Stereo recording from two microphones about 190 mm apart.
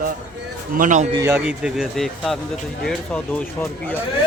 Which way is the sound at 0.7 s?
45° right (ahead or behind).